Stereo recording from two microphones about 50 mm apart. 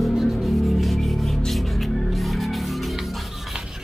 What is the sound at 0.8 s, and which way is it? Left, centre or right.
Music, centre.